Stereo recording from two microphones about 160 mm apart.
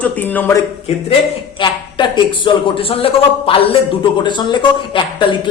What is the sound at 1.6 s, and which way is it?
A woman's voice, 30° left (ahead or behind).